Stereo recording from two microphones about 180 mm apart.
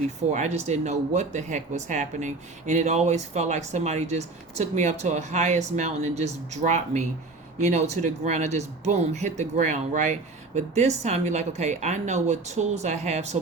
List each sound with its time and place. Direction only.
0.3 s speech: 40° right (ahead or behind)